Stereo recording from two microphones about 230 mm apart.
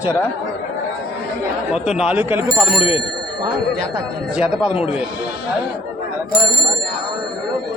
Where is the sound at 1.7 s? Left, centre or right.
Centre.